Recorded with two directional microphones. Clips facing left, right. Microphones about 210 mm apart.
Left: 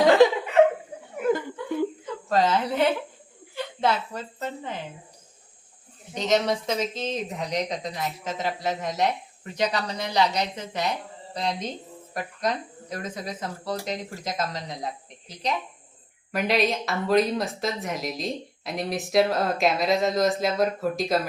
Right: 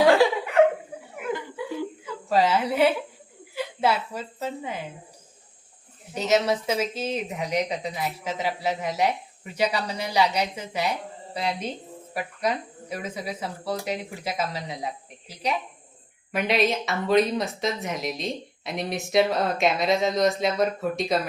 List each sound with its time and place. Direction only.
1.1 s chuckle: 40° left (ahead or behind)
2.3 s a woman's voice: 10° right (ahead or behind)
6.1 s speech: 5° right (ahead or behind)